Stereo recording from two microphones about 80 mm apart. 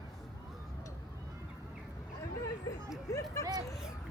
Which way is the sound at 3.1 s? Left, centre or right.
Left.